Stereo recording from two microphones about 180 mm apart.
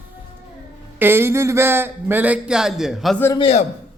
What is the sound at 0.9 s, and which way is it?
Speech, 10° right (ahead or behind).